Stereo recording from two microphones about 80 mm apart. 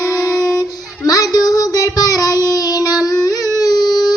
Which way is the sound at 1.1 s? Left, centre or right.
Left.